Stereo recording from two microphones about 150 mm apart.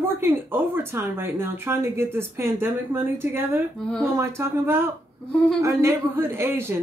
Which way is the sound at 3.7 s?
5° left (ahead or behind).